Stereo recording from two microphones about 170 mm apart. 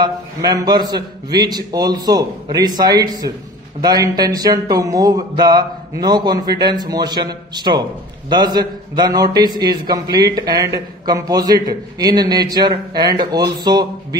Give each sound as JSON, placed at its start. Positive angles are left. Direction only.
{"t": 0.0, "sound": "a man's voice", "side_deg": -20}